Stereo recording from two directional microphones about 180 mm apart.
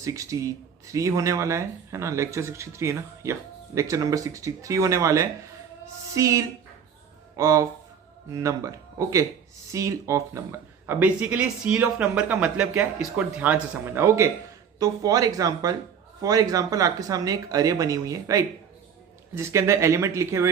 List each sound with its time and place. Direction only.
0.0 s speech: 15° right (ahead or behind)